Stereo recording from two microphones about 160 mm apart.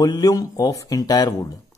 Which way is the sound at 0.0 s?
25° left (ahead or behind).